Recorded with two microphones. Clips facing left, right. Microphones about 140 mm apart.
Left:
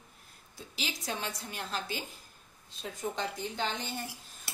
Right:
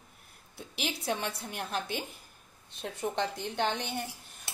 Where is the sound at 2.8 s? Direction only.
65° right (ahead or behind).